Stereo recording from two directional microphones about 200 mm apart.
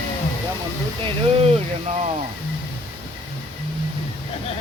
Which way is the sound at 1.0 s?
30° right (ahead or behind).